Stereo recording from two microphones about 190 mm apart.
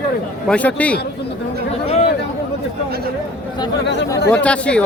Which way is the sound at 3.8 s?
65° left (ahead or behind).